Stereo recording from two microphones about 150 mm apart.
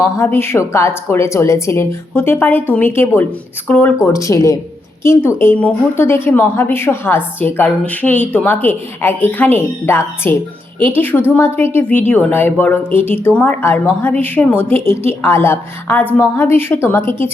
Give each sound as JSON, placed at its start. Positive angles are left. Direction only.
{"t": 0.0, "sound": "a woman's voice", "side_deg": 15}